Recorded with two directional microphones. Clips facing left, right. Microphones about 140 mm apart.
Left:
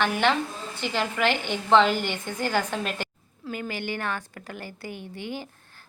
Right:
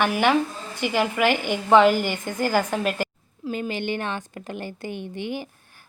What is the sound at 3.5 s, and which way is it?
Speech, 20° right (ahead or behind).